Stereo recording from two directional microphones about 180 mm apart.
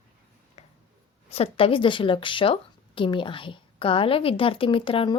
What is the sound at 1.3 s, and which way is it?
A woman's voice, 30° left (ahead or behind).